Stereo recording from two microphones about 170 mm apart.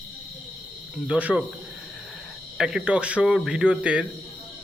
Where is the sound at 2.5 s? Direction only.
5° right (ahead or behind).